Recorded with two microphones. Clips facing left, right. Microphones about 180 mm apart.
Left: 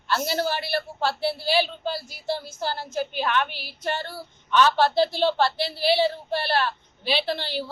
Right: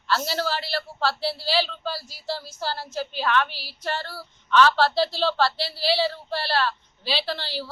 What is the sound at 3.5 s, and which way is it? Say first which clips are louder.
Speech: left 2 dB; 55° left (ahead or behind).